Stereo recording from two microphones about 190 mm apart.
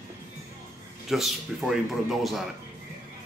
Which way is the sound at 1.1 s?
Centre (ahead or behind).